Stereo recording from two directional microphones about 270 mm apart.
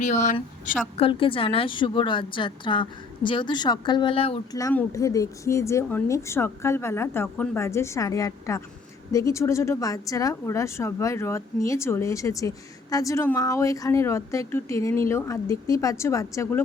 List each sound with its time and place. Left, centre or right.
0.0 s a woman's voice: left; by 16.6 s centre